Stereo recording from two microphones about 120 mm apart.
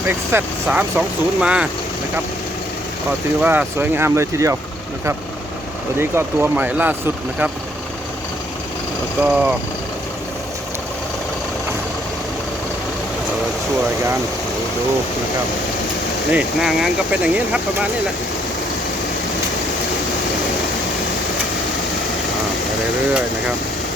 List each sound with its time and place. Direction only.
0.1 s speech: 15° right (ahead or behind)
3.4 s speech: 15° right (ahead or behind)
6.0 s speech: 20° right (ahead or behind)
9.2 s speech: 10° right (ahead or behind)
16.3 s speech: 5° right (ahead or behind)